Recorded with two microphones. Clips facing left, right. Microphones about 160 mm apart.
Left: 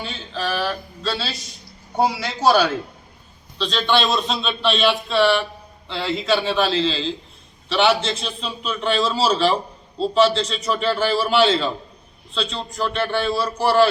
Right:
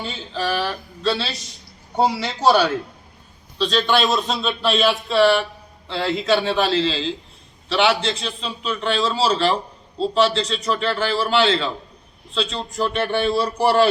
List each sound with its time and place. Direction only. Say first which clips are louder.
0.3 s a man's voice: right 1 dB; centre (ahead or behind)
13.0 s speech: right 1 dB; 20° right (ahead or behind)